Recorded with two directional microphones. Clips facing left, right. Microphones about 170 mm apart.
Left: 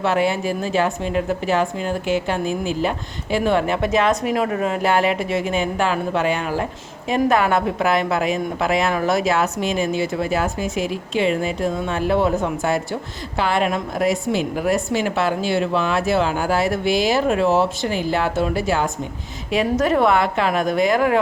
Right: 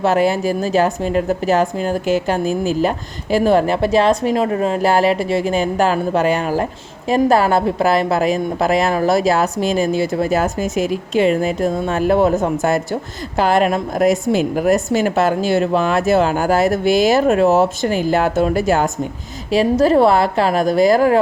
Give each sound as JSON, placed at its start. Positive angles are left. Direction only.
{"t": 0.0, "sound": "a woman's voice", "side_deg": -40}
{"t": 19.5, "sound": "speech", "side_deg": -30}